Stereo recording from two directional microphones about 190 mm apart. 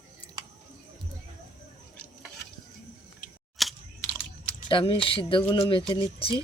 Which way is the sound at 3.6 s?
Centre (ahead or behind).